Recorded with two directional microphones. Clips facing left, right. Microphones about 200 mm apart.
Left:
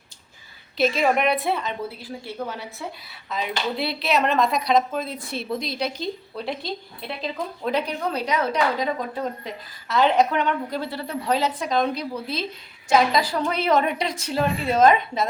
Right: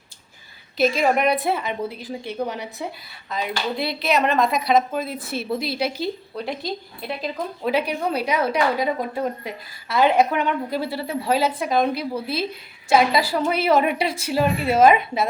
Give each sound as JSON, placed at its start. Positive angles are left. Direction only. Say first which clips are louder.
{"t": 0.8, "sound": "a woman's voice", "louder": "right 1 dB", "side_deg": 0}
{"t": 1.9, "sound": "a woman's voice", "louder": "right 4 dB", "side_deg": -20}
{"t": 3.2, "sound": "a woman's voice", "louder": "right 1 dB", "side_deg": 0}